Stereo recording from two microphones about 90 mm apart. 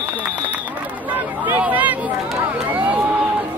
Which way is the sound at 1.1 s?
20° right (ahead or behind).